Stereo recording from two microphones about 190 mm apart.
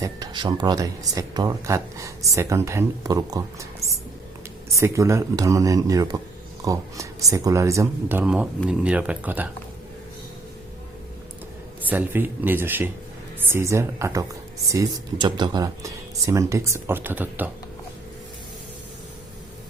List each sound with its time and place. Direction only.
0.0 s speech: 20° right (ahead or behind)
4.7 s speech: 15° right (ahead or behind)
11.8 s speech: 10° right (ahead or behind)